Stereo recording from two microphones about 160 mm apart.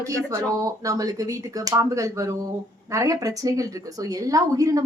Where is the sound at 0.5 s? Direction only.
20° right (ahead or behind).